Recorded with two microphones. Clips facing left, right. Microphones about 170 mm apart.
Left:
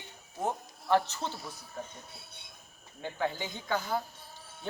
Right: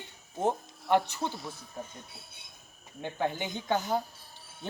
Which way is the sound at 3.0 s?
20° right (ahead or behind).